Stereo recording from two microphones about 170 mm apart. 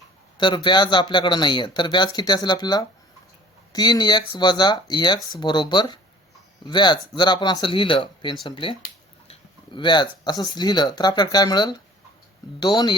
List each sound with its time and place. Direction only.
0.3 s speech: 25° left (ahead or behind)